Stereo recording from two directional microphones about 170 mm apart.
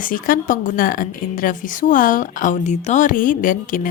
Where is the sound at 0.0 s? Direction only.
55° left (ahead or behind).